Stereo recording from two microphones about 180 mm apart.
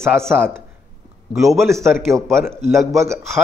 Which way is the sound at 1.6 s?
15° right (ahead or behind).